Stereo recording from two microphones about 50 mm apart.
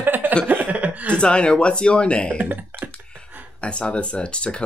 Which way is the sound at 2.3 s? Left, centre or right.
Right.